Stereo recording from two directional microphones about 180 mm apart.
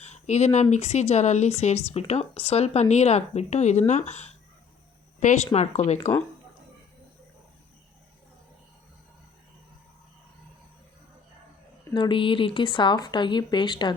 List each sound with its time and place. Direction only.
0.0 s speech: 40° left (ahead or behind)
6.0 s speech: 10° left (ahead or behind)
11.9 s speech: 30° left (ahead or behind)